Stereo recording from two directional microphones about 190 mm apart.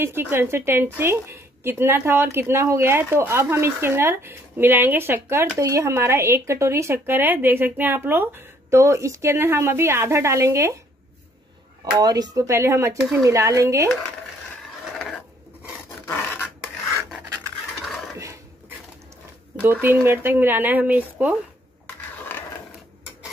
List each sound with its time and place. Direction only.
0.0 s speech: 10° right (ahead or behind)
12.0 s speech: 20° right (ahead or behind)
16.1 s a sound: 10° left (ahead or behind)
18.1 s dog: 15° right (ahead or behind)
19.6 s speech: 10° right (ahead or behind)